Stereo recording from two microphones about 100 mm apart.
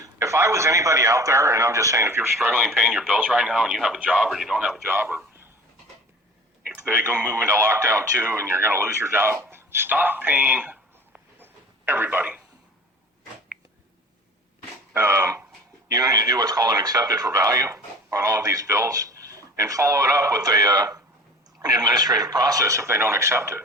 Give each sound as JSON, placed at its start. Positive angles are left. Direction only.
{"t": 0.0, "sound": "a man's voice", "side_deg": -30}
{"t": 2.5, "sound": "speech", "side_deg": -10}
{"t": 4.9, "sound": "a man's voice", "side_deg": -20}
{"t": 6.7, "sound": "speech", "side_deg": -20}
{"t": 14.9, "sound": "speech", "side_deg": -25}